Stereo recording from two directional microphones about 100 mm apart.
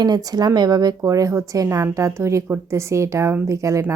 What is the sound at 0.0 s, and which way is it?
A woman's voice, 40° right (ahead or behind).